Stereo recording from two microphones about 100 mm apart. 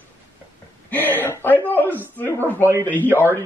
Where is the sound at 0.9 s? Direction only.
20° left (ahead or behind).